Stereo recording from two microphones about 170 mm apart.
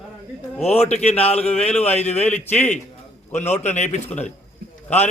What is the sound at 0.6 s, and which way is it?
Speech, 40° left (ahead or behind).